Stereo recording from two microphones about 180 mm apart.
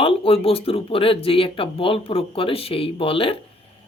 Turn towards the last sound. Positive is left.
turn(degrees=30)  # may be behind; listen again after turning